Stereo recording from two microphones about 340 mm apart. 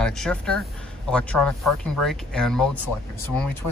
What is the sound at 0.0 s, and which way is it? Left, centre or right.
Speech, centre.